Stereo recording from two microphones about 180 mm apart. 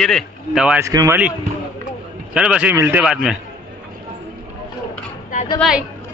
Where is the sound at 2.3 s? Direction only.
5° right (ahead or behind).